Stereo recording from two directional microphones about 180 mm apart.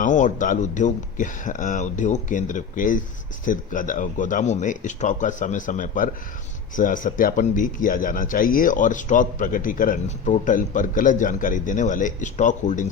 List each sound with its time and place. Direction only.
0.0 s speech: 45° left (ahead or behind)